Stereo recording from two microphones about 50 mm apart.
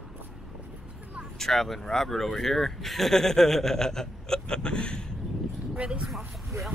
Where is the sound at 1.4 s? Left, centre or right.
Centre.